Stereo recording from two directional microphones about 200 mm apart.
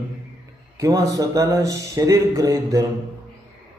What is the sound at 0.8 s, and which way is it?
A man's voice, 15° right (ahead or behind).